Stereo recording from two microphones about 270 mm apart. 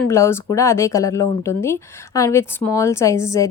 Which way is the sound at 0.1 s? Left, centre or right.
Centre.